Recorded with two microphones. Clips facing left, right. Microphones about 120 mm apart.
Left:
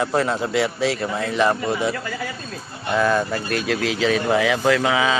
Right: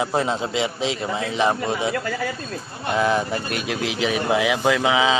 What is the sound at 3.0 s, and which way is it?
Speech, 15° right (ahead or behind).